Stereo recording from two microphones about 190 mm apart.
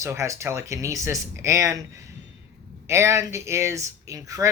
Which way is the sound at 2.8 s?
15° right (ahead or behind).